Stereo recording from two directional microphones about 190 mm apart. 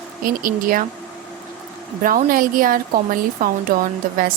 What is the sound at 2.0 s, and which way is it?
Speech, 45° right (ahead or behind).